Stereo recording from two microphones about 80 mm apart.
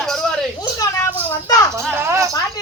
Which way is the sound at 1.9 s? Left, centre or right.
Right.